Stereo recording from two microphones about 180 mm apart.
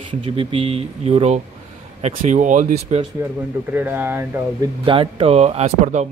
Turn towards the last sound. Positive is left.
turn(degrees=-40)  # may be behind; listen again after turning